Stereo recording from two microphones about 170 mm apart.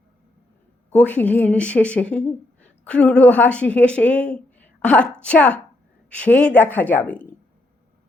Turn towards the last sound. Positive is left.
turn(degrees=10)  # may be behind; listen again after turning